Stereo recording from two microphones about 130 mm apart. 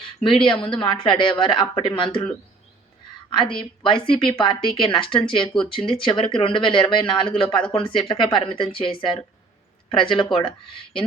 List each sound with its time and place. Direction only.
0.0 s a sound: 40° left (ahead or behind)
0.4 s speech: 40° left (ahead or behind)
3.3 s speech: 40° left (ahead or behind)